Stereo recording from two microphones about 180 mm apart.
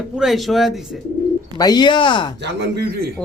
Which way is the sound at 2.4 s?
65° right (ahead or behind).